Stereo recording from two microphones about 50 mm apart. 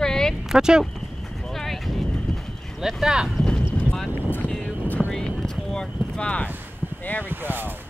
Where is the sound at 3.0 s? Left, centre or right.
Centre.